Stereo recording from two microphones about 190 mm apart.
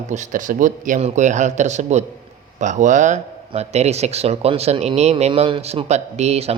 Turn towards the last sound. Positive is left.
turn(degrees=-35)  # may be behind; listen again after turning